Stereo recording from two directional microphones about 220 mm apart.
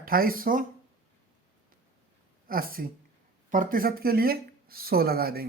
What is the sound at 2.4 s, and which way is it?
Speech, 40° right (ahead or behind).